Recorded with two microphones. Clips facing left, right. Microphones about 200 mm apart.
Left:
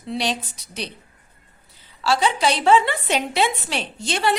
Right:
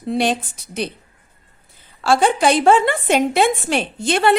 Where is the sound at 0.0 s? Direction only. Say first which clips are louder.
Right 6 dB; 50° right (ahead or behind).